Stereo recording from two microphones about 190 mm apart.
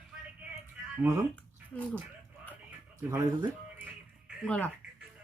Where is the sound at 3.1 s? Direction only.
15° right (ahead or behind).